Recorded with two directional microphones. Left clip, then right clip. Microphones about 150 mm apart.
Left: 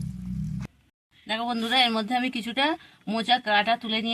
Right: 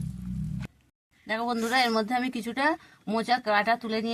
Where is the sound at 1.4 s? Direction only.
20° right (ahead or behind).